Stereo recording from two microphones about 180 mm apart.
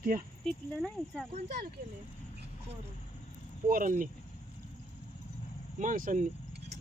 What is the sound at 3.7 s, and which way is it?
Speech, 50° right (ahead or behind).